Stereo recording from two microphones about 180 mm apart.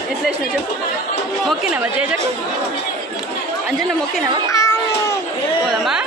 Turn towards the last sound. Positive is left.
turn(degrees=20)  # may be behind; listen again after turning